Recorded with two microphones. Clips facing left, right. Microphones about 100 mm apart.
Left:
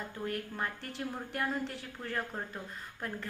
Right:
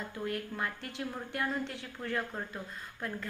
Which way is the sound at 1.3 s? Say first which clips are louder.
Even; 35° left (ahead or behind).